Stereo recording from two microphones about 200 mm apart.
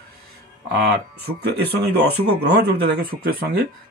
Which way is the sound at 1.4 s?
55° right (ahead or behind).